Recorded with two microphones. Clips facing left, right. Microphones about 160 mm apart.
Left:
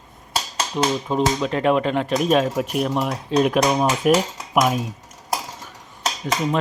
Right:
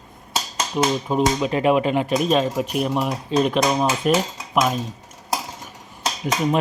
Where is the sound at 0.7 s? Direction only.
5° right (ahead or behind).